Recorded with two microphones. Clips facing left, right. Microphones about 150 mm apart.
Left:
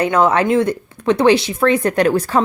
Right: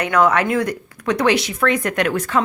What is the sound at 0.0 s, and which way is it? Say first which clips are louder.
Speech: left 2 dB; 25° left (ahead or behind).